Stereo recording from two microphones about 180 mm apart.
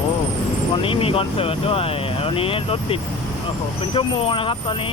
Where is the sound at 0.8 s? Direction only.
30° left (ahead or behind).